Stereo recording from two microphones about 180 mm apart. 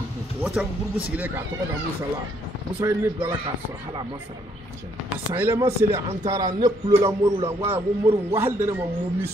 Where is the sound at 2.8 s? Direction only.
10° right (ahead or behind).